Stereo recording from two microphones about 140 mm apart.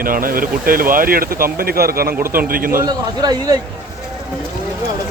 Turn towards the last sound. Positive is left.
turn(degrees=-30)  # may be behind; listen again after turning